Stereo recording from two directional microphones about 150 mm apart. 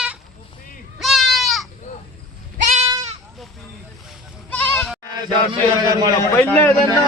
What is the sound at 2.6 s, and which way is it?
Goat, 50° right (ahead or behind).